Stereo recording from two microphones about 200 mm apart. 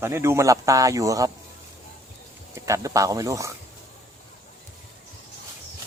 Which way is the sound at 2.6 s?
15° right (ahead or behind).